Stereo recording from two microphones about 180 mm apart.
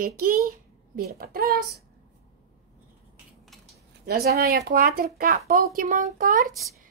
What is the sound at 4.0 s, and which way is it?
A woman's voice, 60° right (ahead or behind).